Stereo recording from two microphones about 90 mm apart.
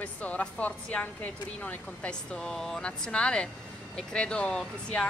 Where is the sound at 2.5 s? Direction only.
5° left (ahead or behind).